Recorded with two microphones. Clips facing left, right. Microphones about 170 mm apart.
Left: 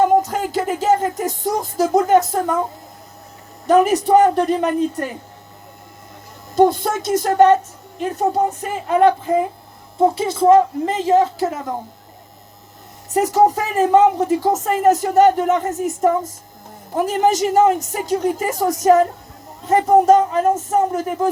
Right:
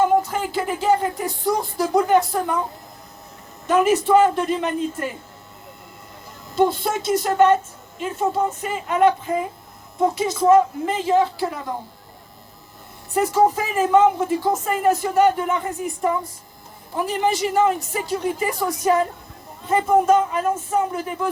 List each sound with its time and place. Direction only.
0.0 s music: 40° left (ahead or behind)
3.7 s speech: 40° left (ahead or behind)
6.6 s speech: 45° left (ahead or behind)
13.1 s a woman's voice: 40° left (ahead or behind)